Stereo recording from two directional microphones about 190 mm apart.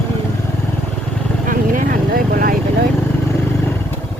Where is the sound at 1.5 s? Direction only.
45° right (ahead or behind).